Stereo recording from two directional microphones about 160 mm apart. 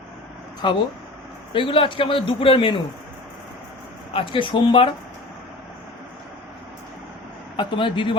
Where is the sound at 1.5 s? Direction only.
35° left (ahead or behind).